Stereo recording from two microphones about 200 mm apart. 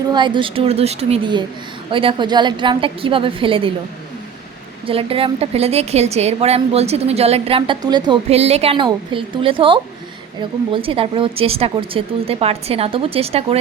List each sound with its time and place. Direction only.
0.1 s speech: 25° right (ahead or behind)
4.9 s a woman's voice: 30° right (ahead or behind)